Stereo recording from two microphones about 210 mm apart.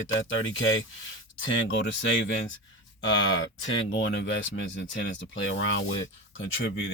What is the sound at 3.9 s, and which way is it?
Speech, 60° left (ahead or behind).